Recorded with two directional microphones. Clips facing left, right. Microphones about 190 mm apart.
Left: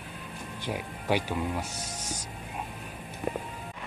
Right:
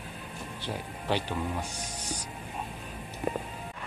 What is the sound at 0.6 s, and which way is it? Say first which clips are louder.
A man's voice: left 2 dB; 10° left (ahead or behind).